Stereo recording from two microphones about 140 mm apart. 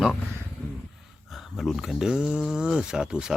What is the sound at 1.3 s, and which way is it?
Speech, centre (ahead or behind).